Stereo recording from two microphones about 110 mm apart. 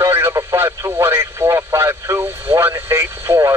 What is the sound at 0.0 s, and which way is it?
Radio, 25° right (ahead or behind).